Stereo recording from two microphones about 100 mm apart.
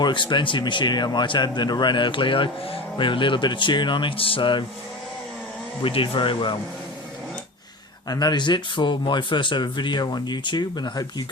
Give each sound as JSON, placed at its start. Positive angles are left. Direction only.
{"t": 0.0, "sound": "speech", "side_deg": 50}
{"t": 5.8, "sound": "speech", "side_deg": 60}
{"t": 8.1, "sound": "speech", "side_deg": 45}